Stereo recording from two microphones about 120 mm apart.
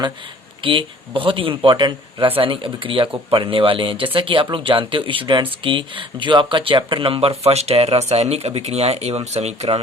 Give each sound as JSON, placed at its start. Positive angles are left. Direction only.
{"t": 0.6, "sound": "speech", "side_deg": -45}